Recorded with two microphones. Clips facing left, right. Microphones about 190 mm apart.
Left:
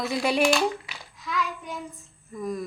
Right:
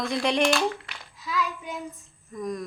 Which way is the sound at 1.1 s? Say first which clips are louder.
Right 1 dB; 5° right (ahead or behind).